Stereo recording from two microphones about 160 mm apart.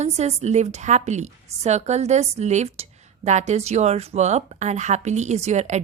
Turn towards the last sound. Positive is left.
turn(degrees=-45)  # may be behind; listen again after turning